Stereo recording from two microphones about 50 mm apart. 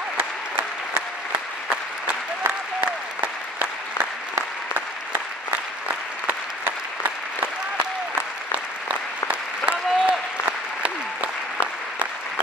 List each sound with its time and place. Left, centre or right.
2.0 s applause: right
7.0 s applause: right
9.3 s applause: right